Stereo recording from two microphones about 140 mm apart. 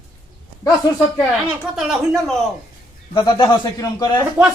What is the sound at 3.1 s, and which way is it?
Speech, 30° left (ahead or behind).